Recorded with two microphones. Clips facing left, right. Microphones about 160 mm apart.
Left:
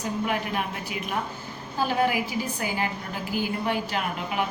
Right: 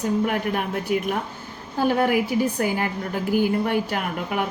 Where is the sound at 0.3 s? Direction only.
50° right (ahead or behind).